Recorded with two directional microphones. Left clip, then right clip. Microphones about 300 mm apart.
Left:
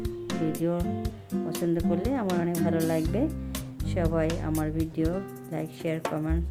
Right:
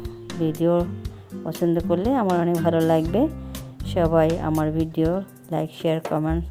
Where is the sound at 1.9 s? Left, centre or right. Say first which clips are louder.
Right 7 dB; centre.